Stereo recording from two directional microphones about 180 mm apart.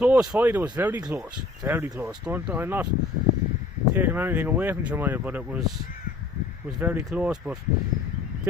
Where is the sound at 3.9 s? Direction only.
10° right (ahead or behind).